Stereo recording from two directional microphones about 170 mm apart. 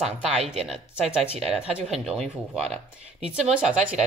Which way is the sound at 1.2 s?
5° right (ahead or behind).